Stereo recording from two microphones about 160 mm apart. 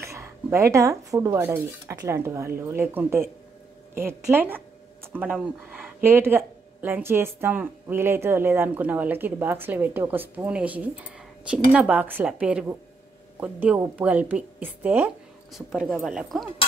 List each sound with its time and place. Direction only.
0.0 s speech: 15° right (ahead or behind); by 16.4 s centre (ahead or behind)